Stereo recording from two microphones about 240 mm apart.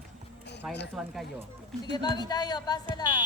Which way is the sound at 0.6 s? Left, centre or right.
Centre.